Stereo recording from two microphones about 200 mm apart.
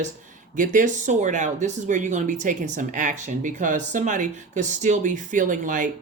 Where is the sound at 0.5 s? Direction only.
40° right (ahead or behind).